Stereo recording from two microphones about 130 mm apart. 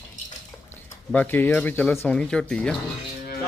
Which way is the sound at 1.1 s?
15° left (ahead or behind).